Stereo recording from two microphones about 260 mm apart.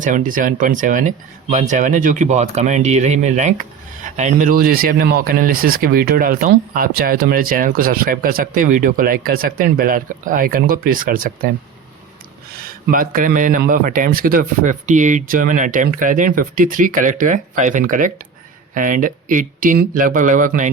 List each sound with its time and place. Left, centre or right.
0.0 s speech: right
12.5 s speech: right